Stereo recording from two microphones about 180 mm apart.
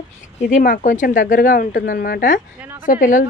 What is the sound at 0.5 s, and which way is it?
Speech, 45° left (ahead or behind).